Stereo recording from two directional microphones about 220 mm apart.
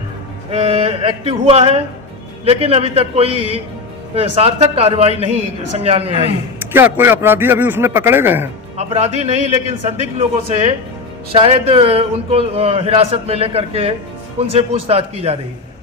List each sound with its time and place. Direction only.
0.5 s a sound: 30° right (ahead or behind)
2.4 s a man's voice: 25° right (ahead or behind)
6.7 s a man's voice: 10° right (ahead or behind)
8.8 s a man's voice: 30° right (ahead or behind)